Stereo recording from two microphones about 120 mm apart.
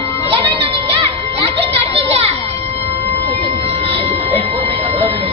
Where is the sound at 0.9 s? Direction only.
50° right (ahead or behind).